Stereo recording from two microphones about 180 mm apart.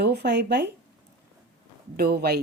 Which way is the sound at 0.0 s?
65° right (ahead or behind).